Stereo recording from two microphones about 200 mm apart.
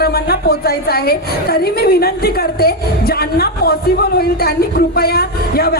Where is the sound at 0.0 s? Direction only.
50° left (ahead or behind).